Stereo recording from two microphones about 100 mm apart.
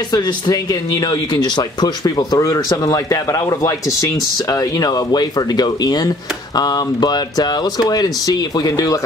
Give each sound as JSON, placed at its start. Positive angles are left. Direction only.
{"t": 0.1, "sound": "speech", "side_deg": 40}